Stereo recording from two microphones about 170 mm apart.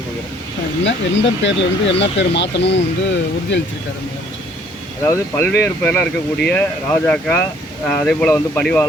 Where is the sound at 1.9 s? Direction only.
90° left.